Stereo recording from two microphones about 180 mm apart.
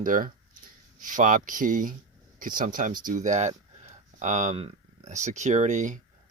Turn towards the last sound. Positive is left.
turn(degrees=-45)  # may be behind; listen again after turning